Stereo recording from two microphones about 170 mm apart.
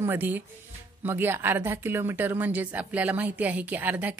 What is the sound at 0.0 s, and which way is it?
A woman's voice, 10° right (ahead or behind).